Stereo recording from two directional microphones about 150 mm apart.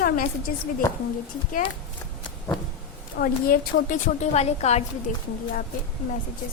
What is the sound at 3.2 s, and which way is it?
A woman's voice, 80° left.